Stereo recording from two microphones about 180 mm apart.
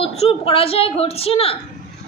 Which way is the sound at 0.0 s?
30° left (ahead or behind).